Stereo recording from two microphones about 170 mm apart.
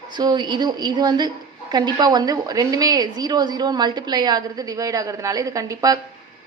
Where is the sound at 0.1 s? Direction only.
25° right (ahead or behind).